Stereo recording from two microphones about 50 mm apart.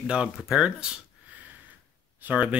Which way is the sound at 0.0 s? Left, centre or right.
Centre.